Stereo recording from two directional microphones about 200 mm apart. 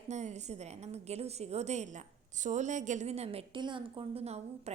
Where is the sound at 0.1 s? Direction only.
35° right (ahead or behind).